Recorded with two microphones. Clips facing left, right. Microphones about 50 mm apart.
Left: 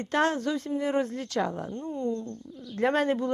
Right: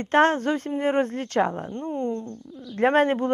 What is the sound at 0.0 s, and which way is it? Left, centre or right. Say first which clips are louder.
A woman's voice: right 6 dB; right.